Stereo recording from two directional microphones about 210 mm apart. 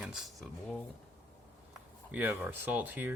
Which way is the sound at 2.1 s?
10° right (ahead or behind).